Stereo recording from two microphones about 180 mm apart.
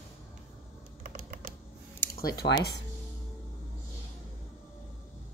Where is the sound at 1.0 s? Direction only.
50° right (ahead or behind).